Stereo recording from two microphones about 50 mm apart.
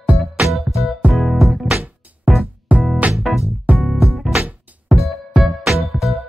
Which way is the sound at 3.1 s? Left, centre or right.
Centre.